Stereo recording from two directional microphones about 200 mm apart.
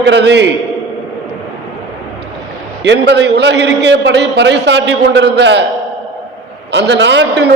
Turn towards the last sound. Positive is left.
turn(degrees=-60)  # may be behind; listen again after turning